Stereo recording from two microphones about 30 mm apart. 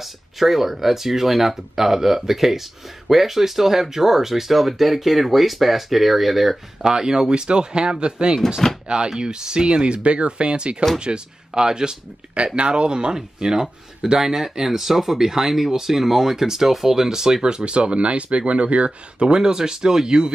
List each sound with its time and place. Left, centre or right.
0.0 s speech: centre
6.8 s speech: centre
12.5 s speech: right
18.9 s speech: right